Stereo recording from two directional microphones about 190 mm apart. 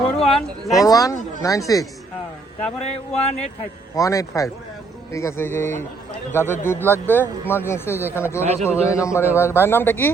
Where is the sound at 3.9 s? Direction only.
15° left (ahead or behind).